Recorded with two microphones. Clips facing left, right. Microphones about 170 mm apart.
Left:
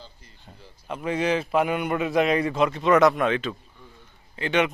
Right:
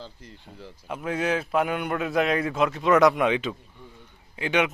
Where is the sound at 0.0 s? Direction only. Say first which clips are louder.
Right 6 dB; 80° right.